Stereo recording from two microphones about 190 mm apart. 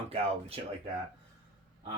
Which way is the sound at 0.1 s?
30° right (ahead or behind).